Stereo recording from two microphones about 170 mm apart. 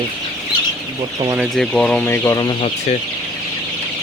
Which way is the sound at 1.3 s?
Centre (ahead or behind).